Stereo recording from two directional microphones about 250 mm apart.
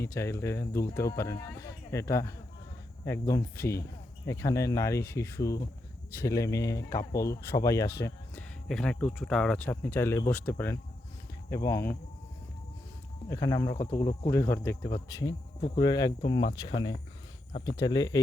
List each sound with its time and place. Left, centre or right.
0.0 s speech: centre
13.3 s speech: centre